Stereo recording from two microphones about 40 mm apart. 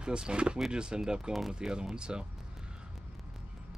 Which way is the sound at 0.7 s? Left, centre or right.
Centre.